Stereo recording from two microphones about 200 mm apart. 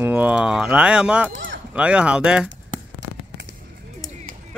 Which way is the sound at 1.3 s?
65° right (ahead or behind).